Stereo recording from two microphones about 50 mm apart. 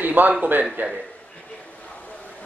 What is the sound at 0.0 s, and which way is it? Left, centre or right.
Speech, right.